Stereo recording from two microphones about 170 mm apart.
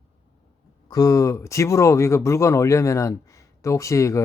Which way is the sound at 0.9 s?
20° left (ahead or behind).